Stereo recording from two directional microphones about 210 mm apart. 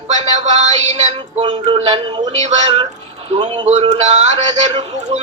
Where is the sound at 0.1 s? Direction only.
35° right (ahead or behind).